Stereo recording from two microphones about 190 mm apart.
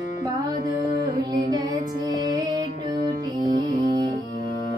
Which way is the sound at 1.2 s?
20° right (ahead or behind).